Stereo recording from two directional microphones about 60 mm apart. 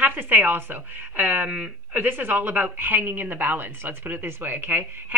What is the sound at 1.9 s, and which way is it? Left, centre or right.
A woman's voice, right.